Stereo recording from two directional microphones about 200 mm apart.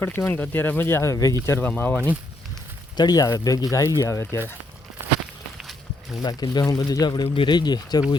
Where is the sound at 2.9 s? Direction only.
20° left (ahead or behind).